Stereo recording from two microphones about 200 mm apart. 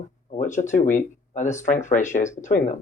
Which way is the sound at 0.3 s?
40° left (ahead or behind).